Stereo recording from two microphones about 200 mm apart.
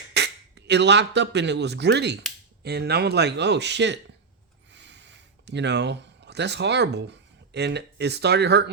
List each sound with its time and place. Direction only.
0.1 s speech: 55° right (ahead or behind)